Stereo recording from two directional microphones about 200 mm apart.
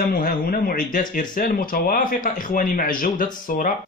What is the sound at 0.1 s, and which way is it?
Speech, 45° left (ahead or behind).